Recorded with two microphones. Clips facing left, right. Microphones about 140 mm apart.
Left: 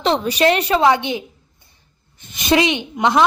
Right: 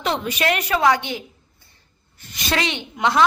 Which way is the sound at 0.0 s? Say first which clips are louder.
Left 6 dB; 30° left (ahead or behind).